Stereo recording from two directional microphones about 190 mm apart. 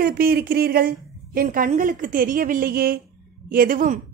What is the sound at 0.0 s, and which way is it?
A woman's voice, 50° right (ahead or behind).